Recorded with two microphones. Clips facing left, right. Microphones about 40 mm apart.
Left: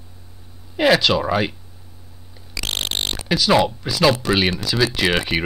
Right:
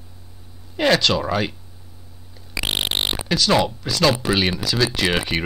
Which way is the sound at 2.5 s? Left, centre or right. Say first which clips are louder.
Right 2 dB; centre.